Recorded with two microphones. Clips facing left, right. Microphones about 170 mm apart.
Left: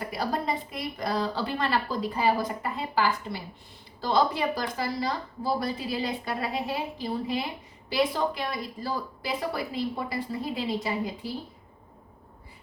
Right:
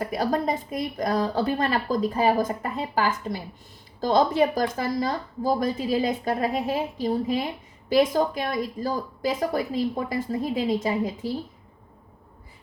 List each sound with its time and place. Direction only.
0.1 s a woman's voice: 45° right (ahead or behind)